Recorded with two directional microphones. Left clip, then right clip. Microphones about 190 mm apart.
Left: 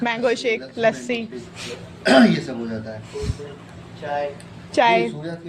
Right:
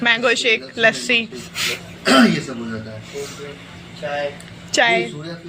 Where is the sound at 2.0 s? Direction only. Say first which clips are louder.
Right 1 dB; 30° left (ahead or behind).